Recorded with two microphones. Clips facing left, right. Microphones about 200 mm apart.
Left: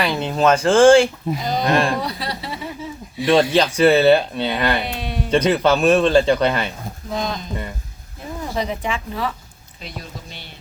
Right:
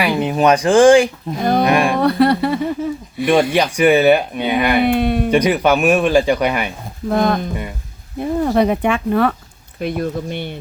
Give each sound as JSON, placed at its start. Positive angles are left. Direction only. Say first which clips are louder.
{"t": 0.0, "sound": "speech", "louder": "right 3 dB", "side_deg": -15}
{"t": 1.4, "sound": "speech", "louder": "right 5 dB", "side_deg": -55}
{"t": 3.5, "sound": "speech", "louder": "right 1 dB", "side_deg": -10}
{"t": 4.8, "sound": "speech", "louder": "right 11 dB", "side_deg": -55}
{"t": 5.3, "sound": "speech", "louder": "left 1 dB", "side_deg": -10}
{"t": 7.1, "sound": "speech", "louder": "right 9 dB", "side_deg": -55}